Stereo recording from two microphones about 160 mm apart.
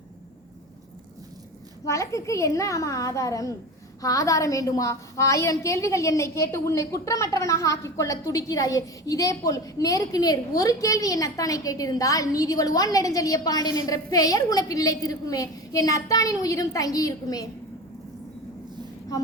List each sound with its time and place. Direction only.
1.8 s a woman's voice: 20° left (ahead or behind)